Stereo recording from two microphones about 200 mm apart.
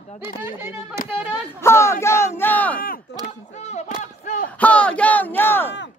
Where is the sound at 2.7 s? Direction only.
45° left (ahead or behind).